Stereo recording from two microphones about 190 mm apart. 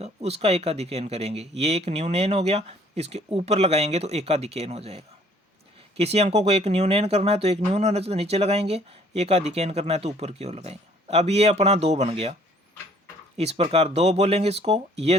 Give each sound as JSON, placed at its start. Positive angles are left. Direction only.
{"t": 0.0, "sound": "speech", "side_deg": -35}
{"t": 13.3, "sound": "speech", "side_deg": -35}